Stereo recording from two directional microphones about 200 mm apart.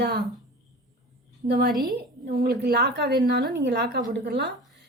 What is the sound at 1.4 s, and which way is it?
A woman's voice, 50° right (ahead or behind).